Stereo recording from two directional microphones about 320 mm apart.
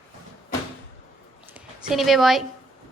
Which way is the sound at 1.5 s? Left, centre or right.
Centre.